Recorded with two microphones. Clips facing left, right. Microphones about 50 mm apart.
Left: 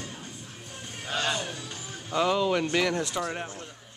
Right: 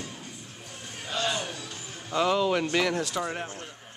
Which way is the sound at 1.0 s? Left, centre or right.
Left.